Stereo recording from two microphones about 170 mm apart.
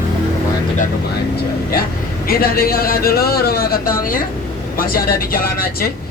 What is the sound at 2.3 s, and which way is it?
A man's voice, 60° left (ahead or behind).